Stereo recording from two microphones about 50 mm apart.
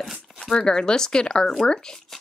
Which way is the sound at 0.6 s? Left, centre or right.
Centre.